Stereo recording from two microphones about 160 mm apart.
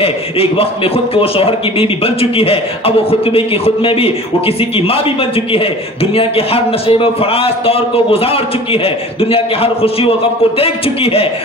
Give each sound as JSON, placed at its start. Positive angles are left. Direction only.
{"t": 0.0, "sound": "a man's voice", "side_deg": 35}
{"t": 6.1, "sound": "a man's voice", "side_deg": 35}